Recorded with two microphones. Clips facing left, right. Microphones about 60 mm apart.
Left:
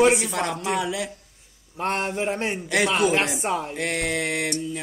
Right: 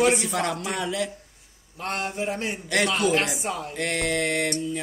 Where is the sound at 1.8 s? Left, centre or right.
Left.